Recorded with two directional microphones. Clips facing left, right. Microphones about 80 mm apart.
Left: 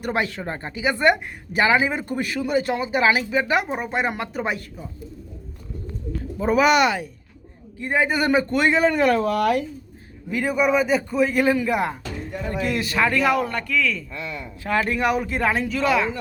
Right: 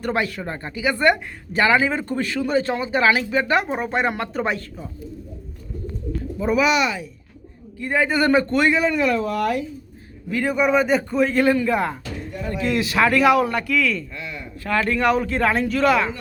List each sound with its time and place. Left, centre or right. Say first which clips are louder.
0.0 s speech: right 1 dB; left
6.4 s speech: left 2 dB; left
7.8 s speech: right 1 dB; centre
8.8 s speech: left 2 dB; left
10.2 s a man's voice: right 1 dB; centre
10.5 s speech: right 1 dB; centre
12.7 s speech: right 4 dB; centre
14.6 s speech: right 2 dB; centre